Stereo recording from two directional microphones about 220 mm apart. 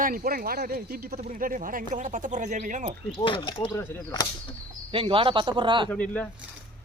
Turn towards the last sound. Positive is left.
turn(degrees=5)  # may be behind; listen again after turning